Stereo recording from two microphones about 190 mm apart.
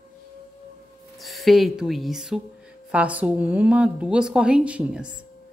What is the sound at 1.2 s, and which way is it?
A woman's voice, centre (ahead or behind).